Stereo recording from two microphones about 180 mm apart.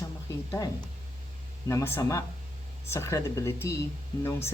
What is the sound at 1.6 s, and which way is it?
A man's voice, 15° left (ahead or behind).